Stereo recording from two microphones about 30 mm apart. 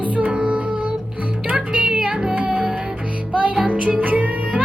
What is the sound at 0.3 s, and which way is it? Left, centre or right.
Music, right.